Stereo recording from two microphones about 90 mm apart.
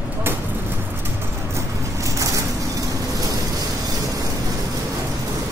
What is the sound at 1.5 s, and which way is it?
Vehicle, 35° right (ahead or behind).